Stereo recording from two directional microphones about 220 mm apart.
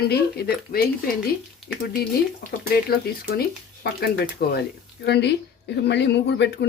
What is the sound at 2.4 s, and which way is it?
A woman's voice, 45° left (ahead or behind).